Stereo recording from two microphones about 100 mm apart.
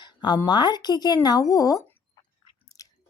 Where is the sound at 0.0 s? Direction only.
45° left (ahead or behind).